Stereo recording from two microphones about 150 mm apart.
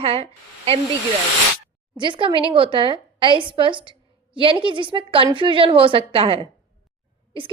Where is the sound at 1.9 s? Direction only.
35° right (ahead or behind).